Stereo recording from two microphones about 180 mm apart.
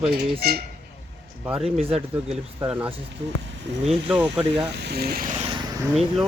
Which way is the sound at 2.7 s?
10° right (ahead or behind).